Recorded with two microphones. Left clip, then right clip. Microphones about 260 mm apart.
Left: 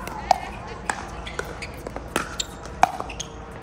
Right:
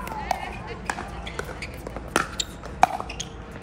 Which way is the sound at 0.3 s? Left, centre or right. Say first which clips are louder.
Left 8 dB; centre.